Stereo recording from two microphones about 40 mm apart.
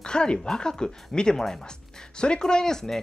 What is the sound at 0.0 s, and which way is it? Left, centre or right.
Speech, left.